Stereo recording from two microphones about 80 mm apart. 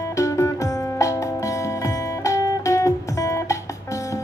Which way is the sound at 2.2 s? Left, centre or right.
Left.